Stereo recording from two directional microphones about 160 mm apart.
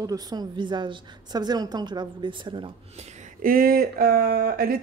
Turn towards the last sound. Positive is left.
turn(degrees=-70)  # may be behind; listen again after turning